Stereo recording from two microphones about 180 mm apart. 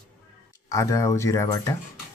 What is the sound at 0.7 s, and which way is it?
Speech, 20° left (ahead or behind).